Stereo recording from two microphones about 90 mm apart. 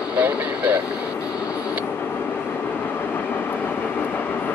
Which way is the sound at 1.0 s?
40° left (ahead or behind).